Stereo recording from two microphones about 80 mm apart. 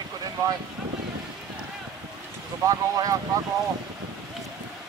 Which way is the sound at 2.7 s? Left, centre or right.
Right.